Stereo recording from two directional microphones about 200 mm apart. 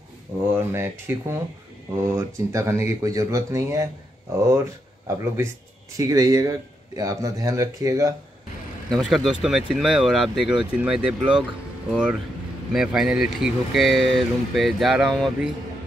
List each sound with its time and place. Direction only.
0.4 s speech: 10° right (ahead or behind)
5.9 s speech: 15° right (ahead or behind)
8.9 s speech: centre (ahead or behind)